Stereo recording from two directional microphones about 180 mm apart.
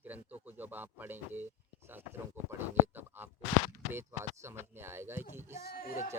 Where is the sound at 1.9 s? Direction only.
10° right (ahead or behind).